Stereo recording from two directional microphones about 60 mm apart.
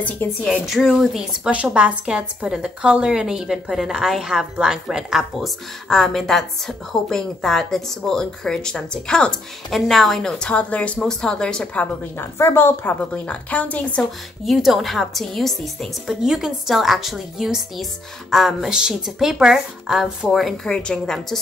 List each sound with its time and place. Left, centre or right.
0.0 s a woman's voice: left
0.7 s a woman's voice: centre
1.5 s a woman's voice: right
5.9 s a woman's voice: centre
10.4 s a woman's voice: left
11.1 s speech: centre
12.2 s a woman's voice: left
13.1 s a woman's voice: centre
14.4 s a woman's voice: centre
16.2 s a woman's voice: centre
20.6 s speech: centre